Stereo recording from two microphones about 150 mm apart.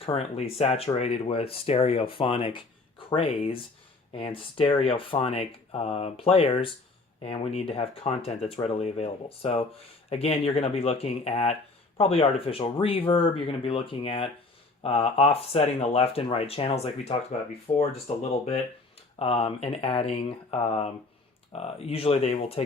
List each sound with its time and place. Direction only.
0.0 s speech: 40° left (ahead or behind)